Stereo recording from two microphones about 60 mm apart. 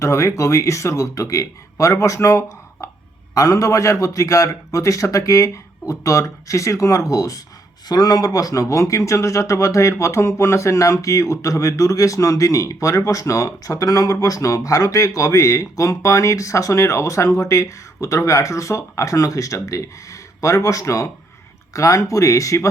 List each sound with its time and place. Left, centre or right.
0.0 s speech: left
3.3 s speech: left
7.9 s speech: left